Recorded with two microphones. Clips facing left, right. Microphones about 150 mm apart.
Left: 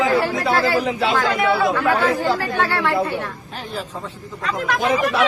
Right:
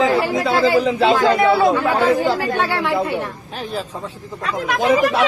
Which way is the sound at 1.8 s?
15° right (ahead or behind).